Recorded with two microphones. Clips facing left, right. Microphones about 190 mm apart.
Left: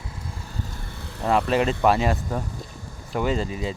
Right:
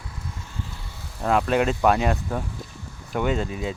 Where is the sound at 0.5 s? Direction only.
45° left (ahead or behind); by 1.2 s 65° left (ahead or behind).